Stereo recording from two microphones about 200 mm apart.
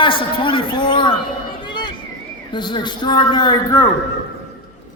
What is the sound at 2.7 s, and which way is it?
A man's voice, 20° left (ahead or behind).